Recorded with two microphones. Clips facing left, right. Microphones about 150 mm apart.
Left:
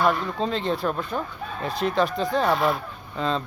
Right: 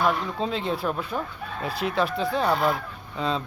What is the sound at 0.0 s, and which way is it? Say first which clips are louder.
Speech: left 2 dB; centre (ahead or behind).